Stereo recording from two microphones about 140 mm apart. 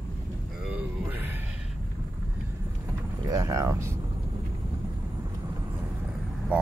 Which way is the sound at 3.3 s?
25° right (ahead or behind).